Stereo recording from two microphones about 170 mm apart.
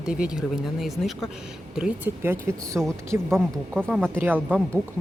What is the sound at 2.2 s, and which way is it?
Speech, 15° right (ahead or behind).